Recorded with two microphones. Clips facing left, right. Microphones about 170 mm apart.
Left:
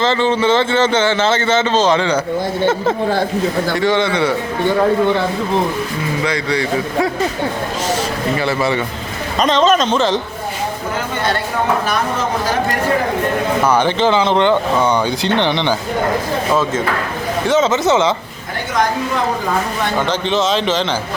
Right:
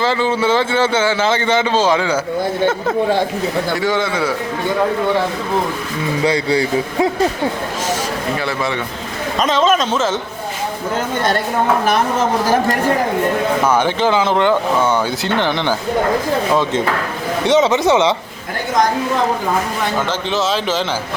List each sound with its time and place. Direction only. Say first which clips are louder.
0.0 s a man's voice: left 1 dB; 10° right (ahead or behind)
3.8 s a man's voice: left 3 dB; centre (ahead or behind)
6.2 s a man's voice: right 4 dB; 30° right (ahead or behind)
8.4 s a man's voice: left 3 dB; centre (ahead or behind)
13.7 s a man's voice: left 2 dB; 10° right (ahead or behind)
17.6 s a man's voice: even; 15° right (ahead or behind)
20.0 s a man's voice: left 4 dB; 5° right (ahead or behind)